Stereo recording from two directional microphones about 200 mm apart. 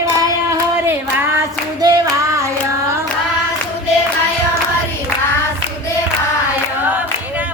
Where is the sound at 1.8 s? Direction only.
20° right (ahead or behind).